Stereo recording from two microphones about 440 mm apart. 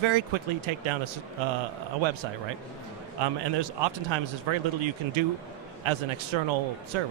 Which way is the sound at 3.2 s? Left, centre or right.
Right.